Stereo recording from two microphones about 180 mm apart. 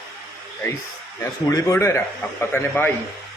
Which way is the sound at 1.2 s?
20° left (ahead or behind).